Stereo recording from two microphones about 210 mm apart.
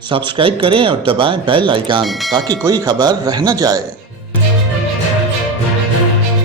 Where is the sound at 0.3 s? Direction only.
25° right (ahead or behind).